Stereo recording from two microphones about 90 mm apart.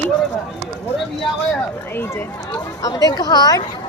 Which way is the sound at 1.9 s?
25° left (ahead or behind).